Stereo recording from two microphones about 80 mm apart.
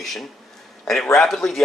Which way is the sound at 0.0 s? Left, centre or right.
Centre.